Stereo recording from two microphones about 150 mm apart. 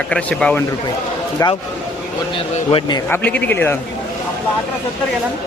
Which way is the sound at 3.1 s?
10° left (ahead or behind).